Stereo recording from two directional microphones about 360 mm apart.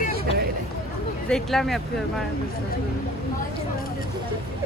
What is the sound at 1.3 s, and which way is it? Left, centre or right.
Speech, centre.